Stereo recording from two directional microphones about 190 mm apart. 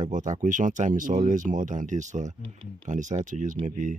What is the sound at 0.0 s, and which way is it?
Speech, 40° right (ahead or behind).